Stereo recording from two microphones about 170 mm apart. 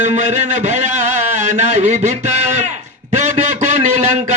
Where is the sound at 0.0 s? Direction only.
45° right (ahead or behind).